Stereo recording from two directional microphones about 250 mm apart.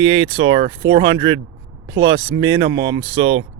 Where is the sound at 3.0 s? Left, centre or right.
Right.